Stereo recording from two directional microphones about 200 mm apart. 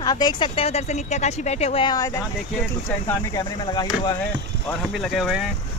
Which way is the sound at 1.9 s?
15° left (ahead or behind).